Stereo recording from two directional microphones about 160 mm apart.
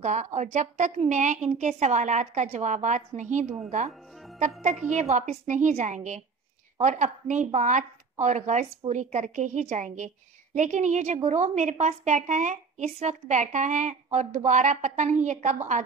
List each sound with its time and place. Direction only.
0.0 s a woman's voice: 45° right (ahead or behind)
3.4 s speech: 5° right (ahead or behind)
5.1 s a woman's voice: 50° right (ahead or behind)